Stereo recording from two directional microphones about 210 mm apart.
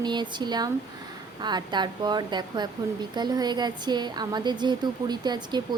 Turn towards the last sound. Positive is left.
turn(degrees=-20)  # may be behind; listen again after turning